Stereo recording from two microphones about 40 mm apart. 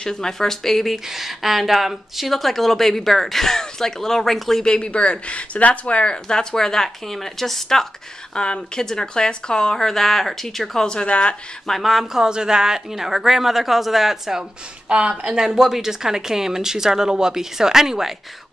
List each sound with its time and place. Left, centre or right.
0.0 s speech: centre
1.1 s speech: centre
4.7 s speech: left
6.2 s speech: centre
8.4 s speech: centre
10.9 s speech: left
11.8 s a woman's voice: centre
14.9 s a woman's voice: right